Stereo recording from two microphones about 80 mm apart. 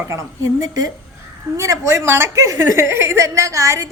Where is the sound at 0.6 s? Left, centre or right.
Right.